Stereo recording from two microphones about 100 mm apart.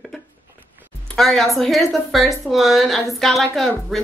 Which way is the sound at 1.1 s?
Centre (ahead or behind).